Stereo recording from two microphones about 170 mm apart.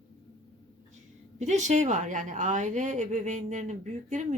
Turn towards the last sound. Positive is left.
turn(degrees=-45)  # may be behind; listen again after turning